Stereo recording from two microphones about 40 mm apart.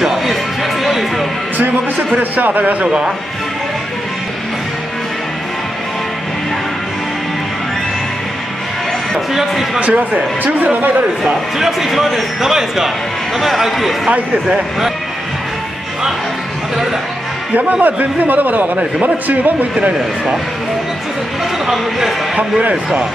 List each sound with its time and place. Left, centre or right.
0.0 s music: centre
2.1 s speech: right
9.3 s a man's voice: centre
9.8 s a man's voice: right
11.5 s a man's voice: centre
12.4 s a man's voice: centre
17.6 s a man's voice: right
18.8 s a man's voice: right
19.2 s a man's voice: right
21.6 s speech: centre
22.4 s speech: right